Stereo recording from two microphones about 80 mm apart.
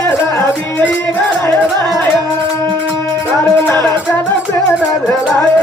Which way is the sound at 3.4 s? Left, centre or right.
Left.